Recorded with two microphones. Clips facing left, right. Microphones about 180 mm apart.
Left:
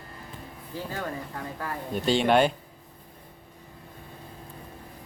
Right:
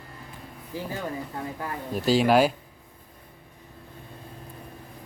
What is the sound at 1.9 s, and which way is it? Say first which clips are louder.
Speech: right 2 dB; 5° right (ahead or behind).